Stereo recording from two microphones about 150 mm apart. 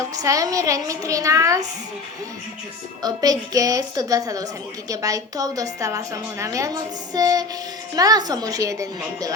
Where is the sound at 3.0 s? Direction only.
25° right (ahead or behind).